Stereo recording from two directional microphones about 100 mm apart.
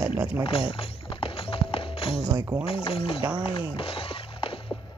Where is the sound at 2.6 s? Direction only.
70° left (ahead or behind).